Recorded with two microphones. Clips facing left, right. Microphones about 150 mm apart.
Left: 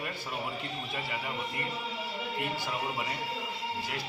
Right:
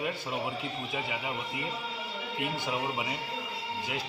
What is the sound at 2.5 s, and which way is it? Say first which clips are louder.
Speech: right 2 dB; 20° right (ahead or behind).